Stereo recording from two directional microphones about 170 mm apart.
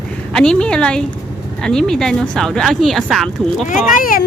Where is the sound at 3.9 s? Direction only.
55° left (ahead or behind).